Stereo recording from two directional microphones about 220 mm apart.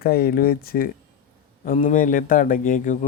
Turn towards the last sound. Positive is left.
turn(degrees=35)  # may be behind; listen again after turning